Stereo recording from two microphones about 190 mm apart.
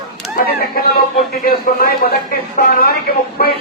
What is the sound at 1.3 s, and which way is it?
Radio, 50° left (ahead or behind).